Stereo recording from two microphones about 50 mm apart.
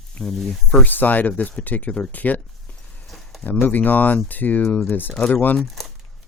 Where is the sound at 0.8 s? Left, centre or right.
Left.